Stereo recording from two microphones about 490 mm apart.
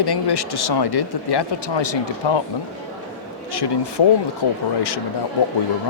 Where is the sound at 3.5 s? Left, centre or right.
Left.